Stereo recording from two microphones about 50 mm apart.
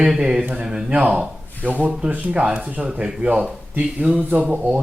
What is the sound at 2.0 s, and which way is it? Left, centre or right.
Speech, right.